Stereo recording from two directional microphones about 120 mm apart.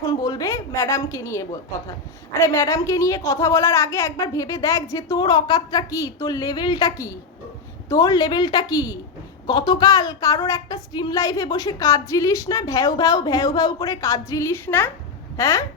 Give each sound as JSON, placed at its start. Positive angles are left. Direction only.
{"t": 0.0, "sound": "a woman's voice", "side_deg": 30}